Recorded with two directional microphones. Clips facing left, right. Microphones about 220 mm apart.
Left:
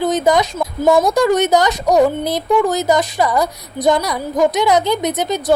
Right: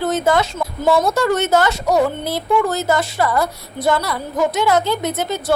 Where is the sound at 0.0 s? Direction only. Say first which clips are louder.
Left 2 dB; 15° left (ahead or behind).